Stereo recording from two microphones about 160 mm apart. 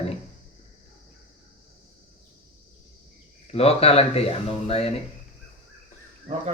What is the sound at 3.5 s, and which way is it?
Speech, 40° left (ahead or behind).